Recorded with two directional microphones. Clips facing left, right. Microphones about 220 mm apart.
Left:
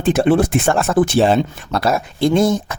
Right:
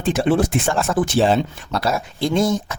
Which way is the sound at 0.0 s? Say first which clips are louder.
Left 4 dB; 55° left (ahead or behind).